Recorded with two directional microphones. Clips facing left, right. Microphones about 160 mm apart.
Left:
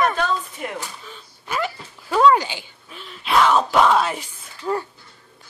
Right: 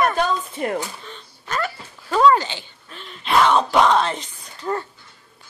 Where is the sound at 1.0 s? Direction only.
5° left (ahead or behind).